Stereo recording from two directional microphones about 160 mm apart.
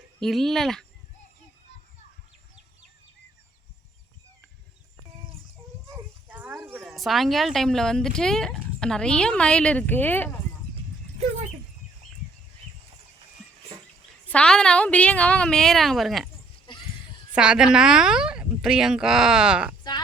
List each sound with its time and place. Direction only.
0.2 s speech: centre (ahead or behind)
6.2 s a sound: 10° right (ahead or behind)
6.8 s speech: centre (ahead or behind)
14.3 s speech: 5° left (ahead or behind)
16.7 s a sound: 30° left (ahead or behind)
17.3 s speech: 5° right (ahead or behind)